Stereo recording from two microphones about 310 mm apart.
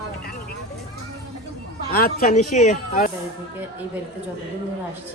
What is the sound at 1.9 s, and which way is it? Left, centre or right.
Speech, left.